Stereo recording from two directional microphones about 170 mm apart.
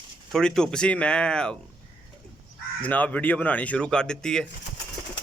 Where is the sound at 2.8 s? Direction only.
10° left (ahead or behind).